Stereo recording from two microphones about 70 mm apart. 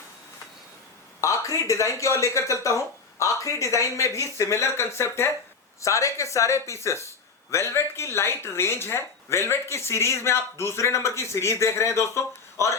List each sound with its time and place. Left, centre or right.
1.2 s speech: left